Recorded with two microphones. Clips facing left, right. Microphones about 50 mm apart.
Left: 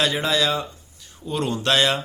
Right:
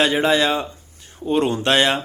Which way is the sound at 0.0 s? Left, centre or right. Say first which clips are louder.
Right 4 dB; right.